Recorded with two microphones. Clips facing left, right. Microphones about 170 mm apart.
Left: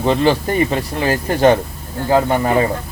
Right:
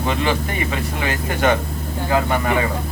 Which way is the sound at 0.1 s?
35° left (ahead or behind).